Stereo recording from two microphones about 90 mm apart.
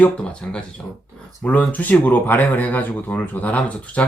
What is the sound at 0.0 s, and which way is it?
Speech, 15° left (ahead or behind).